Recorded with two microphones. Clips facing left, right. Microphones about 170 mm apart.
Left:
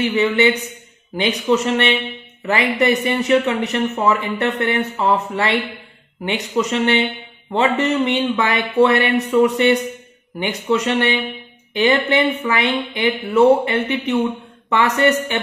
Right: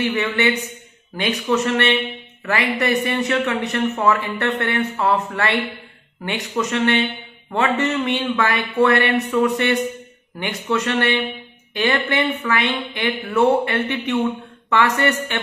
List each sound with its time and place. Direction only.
0.0 s speech: 20° left (ahead or behind)